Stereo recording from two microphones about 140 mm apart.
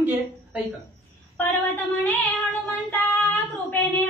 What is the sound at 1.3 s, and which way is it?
Female singing, 15° left (ahead or behind).